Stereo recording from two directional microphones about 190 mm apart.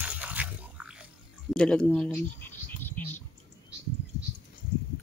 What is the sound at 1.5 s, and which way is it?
Speech, 5° left (ahead or behind).